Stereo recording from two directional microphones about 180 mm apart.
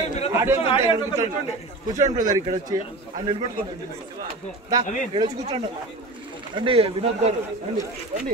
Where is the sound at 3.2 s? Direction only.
30° right (ahead or behind).